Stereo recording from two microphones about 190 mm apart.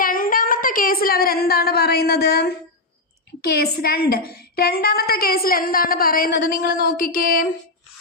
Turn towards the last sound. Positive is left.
turn(degrees=50)  # may be behind; listen again after turning